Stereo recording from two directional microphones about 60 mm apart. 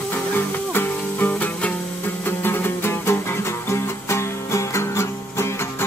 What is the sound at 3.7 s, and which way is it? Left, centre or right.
Music, left.